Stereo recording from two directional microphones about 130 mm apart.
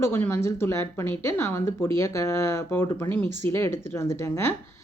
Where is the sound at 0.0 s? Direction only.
20° left (ahead or behind).